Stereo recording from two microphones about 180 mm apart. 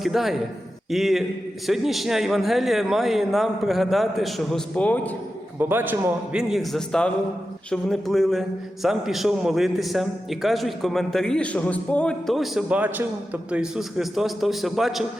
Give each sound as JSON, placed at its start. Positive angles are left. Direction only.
{"t": 0.0, "sound": "a man's voice", "side_deg": 0}
{"t": 5.5, "sound": "a man's voice", "side_deg": -10}
{"t": 6.5, "sound": "a man's voice", "side_deg": 0}